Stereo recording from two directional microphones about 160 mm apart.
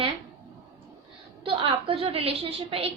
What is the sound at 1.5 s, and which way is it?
A woman's voice, 35° right (ahead or behind).